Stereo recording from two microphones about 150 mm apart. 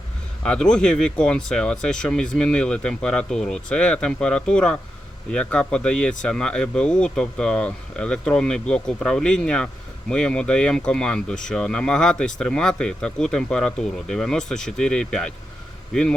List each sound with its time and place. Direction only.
0.4 s speech: 5° left (ahead or behind)